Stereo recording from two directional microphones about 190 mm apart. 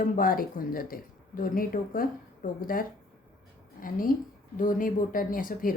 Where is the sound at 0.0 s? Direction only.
50° left (ahead or behind).